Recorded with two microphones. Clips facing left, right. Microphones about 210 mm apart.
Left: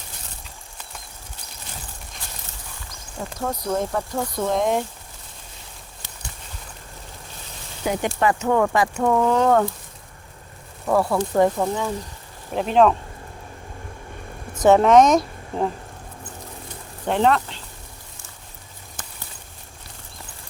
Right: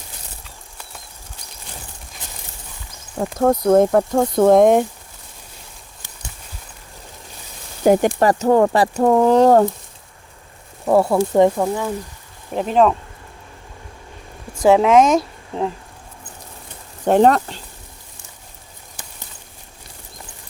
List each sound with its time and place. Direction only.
3.2 s speech: 50° right (ahead or behind)
7.9 s speech: 45° right (ahead or behind)
10.8 s speech: 25° right (ahead or behind)
11.2 s speech: 10° right (ahead or behind)
14.7 s speech: 5° right (ahead or behind)
17.1 s speech: 45° right (ahead or behind)